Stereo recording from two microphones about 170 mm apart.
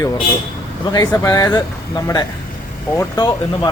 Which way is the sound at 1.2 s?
20° left (ahead or behind).